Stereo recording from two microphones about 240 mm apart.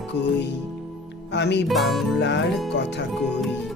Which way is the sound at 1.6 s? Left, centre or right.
Centre.